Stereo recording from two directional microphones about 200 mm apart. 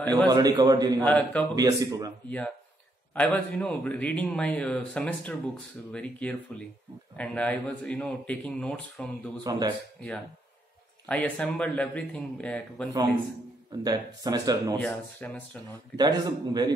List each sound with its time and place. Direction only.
0.3 s speech: 20° right (ahead or behind)
1.0 s a man's voice: 5° left (ahead or behind)
1.5 s speech: 20° right (ahead or behind)
2.2 s a man's voice: 5° left (ahead or behind)
9.4 s speech: 20° right (ahead or behind)
11.1 s a man's voice: 5° left (ahead or behind)
13.7 s speech: 20° right (ahead or behind)
14.8 s a man's voice: 5° left (ahead or behind)
16.0 s speech: 20° right (ahead or behind)